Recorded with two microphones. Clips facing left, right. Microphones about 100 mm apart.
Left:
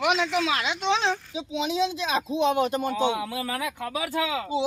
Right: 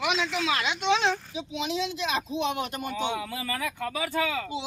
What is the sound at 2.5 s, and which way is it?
Speech, 35° left (ahead or behind).